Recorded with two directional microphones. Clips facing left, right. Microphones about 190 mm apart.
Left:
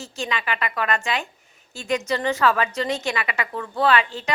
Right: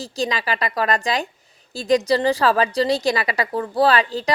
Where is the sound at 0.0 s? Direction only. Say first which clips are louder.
Right 5 dB; 35° right (ahead or behind).